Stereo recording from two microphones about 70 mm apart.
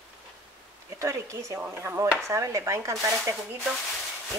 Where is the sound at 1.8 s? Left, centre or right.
Right.